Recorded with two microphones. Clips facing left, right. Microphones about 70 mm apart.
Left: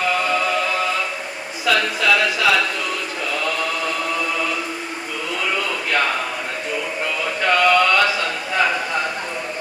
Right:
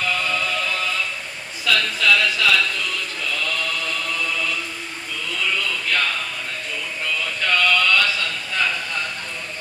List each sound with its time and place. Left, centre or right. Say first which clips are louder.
0.0 s music: left 4 dB; left
1.6 s speech: left 2 dB; left
3.3 s mantra: left 4 dB; left
5.4 s a sound: left 1 dB; left